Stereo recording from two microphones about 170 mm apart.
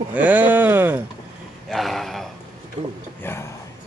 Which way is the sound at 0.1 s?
10° right (ahead or behind).